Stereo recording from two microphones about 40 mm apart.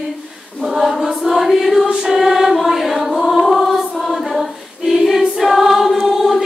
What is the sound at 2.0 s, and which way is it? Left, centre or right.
Music, centre.